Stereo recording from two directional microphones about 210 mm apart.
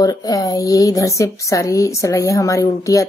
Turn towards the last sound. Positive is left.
turn(degrees=15)  # may be behind; listen again after turning